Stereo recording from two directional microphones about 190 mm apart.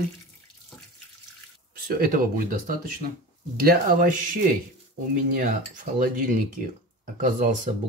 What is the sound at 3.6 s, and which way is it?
Speech, 45° right (ahead or behind).